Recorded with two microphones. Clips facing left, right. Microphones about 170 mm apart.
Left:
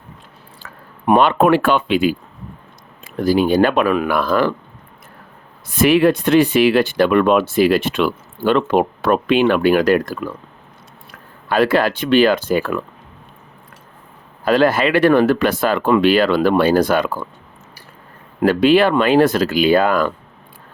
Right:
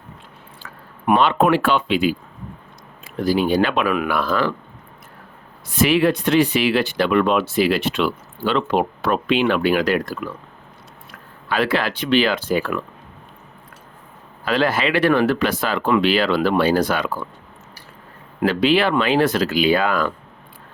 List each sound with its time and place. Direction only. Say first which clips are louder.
1.1 s speech: left 3 dB; 50° left (ahead or behind)
5.6 s speech: left 4 dB; 50° left (ahead or behind)
11.4 s speech: left 5 dB; 45° left (ahead or behind)
14.4 s speech: left 5 dB; 45° left (ahead or behind)
18.4 s speech: left 5 dB; 50° left (ahead or behind)